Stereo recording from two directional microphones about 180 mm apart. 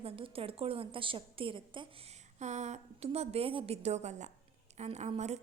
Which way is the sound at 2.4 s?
40° right (ahead or behind).